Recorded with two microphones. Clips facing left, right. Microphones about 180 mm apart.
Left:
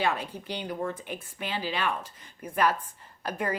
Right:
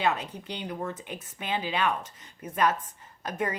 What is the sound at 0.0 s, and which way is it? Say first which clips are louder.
Speech: right 1 dB; 20° right (ahead or behind).